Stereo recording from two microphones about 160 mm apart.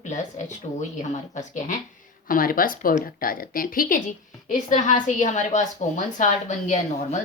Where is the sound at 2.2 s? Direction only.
60° left (ahead or behind).